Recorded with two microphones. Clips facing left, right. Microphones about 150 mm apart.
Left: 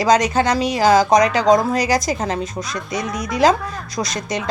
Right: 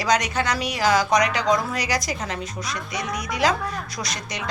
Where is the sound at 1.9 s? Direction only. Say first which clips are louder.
Left 7 dB; 45° left (ahead or behind).